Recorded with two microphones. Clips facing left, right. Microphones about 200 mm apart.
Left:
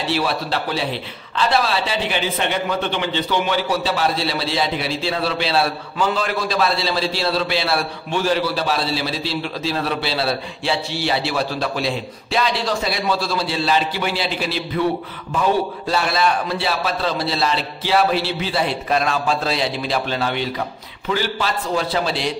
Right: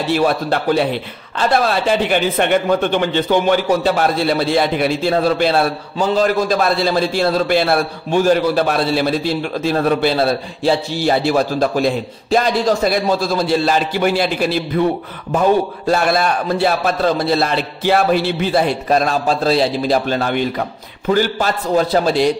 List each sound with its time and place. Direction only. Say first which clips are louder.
0.1 s a man's voice: right 7 dB; 50° right (ahead or behind)
15.9 s a man's voice: right 4 dB; 50° right (ahead or behind)